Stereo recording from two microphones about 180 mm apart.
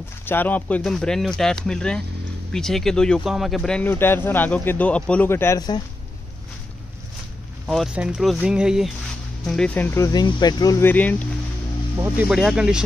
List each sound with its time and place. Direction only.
0.2 s speech: 10° left (ahead or behind)
7.6 s speech: 5° right (ahead or behind)
9.9 s speech: 20° left (ahead or behind)
12.3 s speech: 5° right (ahead or behind)